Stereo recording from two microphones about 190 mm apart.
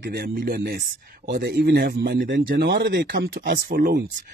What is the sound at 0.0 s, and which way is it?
Speech, 55° right (ahead or behind).